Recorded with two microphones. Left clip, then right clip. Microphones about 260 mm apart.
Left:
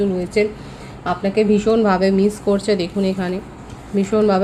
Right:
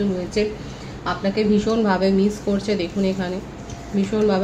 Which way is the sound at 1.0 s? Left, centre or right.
Left.